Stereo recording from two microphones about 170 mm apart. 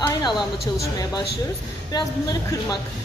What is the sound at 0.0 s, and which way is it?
A woman's voice, 25° left (ahead or behind).